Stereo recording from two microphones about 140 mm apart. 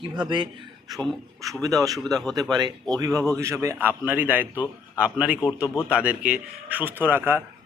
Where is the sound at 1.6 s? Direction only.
25° right (ahead or behind).